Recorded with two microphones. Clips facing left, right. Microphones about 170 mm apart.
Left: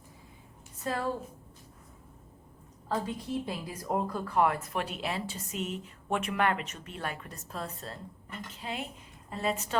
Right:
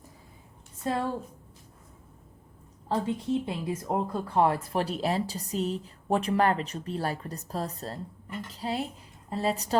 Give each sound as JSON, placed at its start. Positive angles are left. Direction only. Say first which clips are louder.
{"t": 2.9, "sound": "speech", "louder": "right 5 dB", "side_deg": -25}